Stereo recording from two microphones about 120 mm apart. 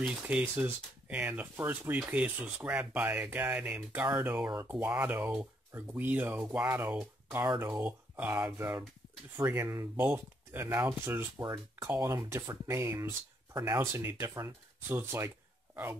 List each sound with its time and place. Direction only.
0.0 s speech: 10° right (ahead or behind)